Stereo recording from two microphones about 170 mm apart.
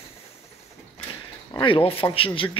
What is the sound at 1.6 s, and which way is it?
Speech, 30° left (ahead or behind).